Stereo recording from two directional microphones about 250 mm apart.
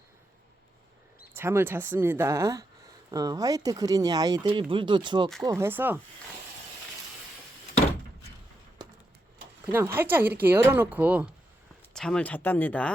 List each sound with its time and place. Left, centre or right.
1.4 s speech: centre
9.6 s speech: centre